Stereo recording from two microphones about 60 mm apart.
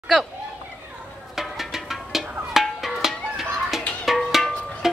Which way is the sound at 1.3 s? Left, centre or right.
Centre.